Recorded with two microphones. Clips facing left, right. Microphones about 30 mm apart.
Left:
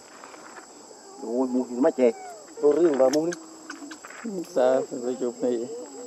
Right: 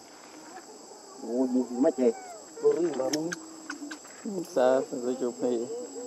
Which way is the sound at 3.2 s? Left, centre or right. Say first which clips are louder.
Left 5 dB; centre.